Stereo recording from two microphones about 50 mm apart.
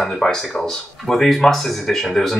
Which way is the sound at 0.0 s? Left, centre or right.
Centre.